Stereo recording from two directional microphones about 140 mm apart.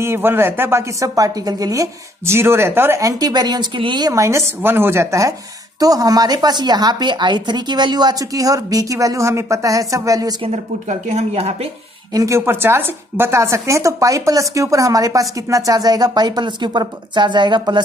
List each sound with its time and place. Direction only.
0.0 s speech: 15° right (ahead or behind)
10.4 s a woman's voice: 55° right (ahead or behind)
12.1 s speech: 25° right (ahead or behind)